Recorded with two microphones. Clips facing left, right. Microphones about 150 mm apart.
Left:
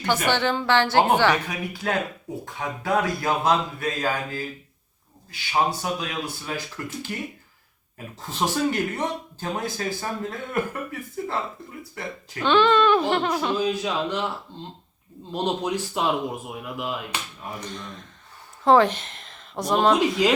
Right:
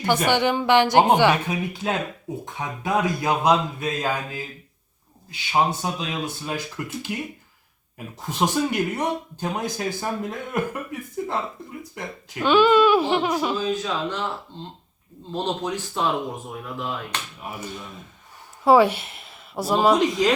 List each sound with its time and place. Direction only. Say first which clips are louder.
0.0 s speech: right 2 dB; 15° right (ahead or behind)
7.9 s speech: right 3 dB; 15° right (ahead or behind)
11.8 s speech: left 2 dB; 15° right (ahead or behind)
13.6 s speech: left 1 dB; 15° left (ahead or behind)
15.3 s speech: left 1 dB; 10° left (ahead or behind)
17.4 s speech: right 1 dB; 5° right (ahead or behind)